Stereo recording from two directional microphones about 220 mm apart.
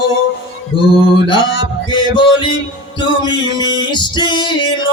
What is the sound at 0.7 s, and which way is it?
Male singing, 25° left (ahead or behind).